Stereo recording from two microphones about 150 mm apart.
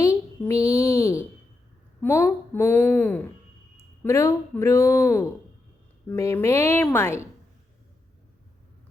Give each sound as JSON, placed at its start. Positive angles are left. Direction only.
{"t": 0.0, "sound": "child singing", "side_deg": 20}
{"t": 2.0, "sound": "speech", "side_deg": 15}